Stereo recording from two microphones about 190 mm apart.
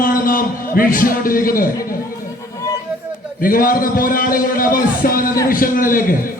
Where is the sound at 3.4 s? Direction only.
50° left (ahead or behind).